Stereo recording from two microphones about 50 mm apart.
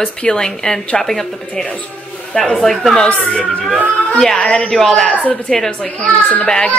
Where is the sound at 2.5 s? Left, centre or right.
Centre.